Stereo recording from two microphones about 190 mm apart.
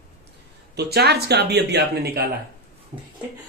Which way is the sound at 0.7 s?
60° right (ahead or behind).